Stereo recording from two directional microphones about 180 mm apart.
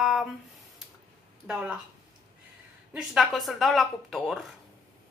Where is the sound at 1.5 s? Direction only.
5° right (ahead or behind).